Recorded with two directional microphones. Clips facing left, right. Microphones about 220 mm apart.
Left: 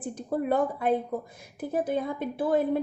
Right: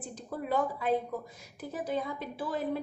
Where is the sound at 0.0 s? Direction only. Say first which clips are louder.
Left 9 dB; 55° left (ahead or behind).